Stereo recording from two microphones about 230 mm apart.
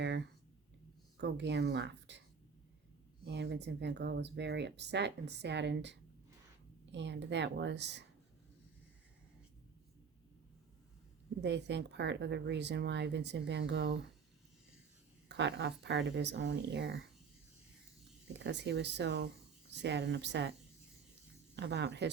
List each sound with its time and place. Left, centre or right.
1.2 s speech: right
3.2 s speech: right
11.3 s speech: right
15.3 s speech: right
18.3 s speech: right